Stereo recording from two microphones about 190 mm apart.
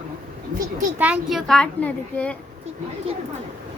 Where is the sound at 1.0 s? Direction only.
5° right (ahead or behind).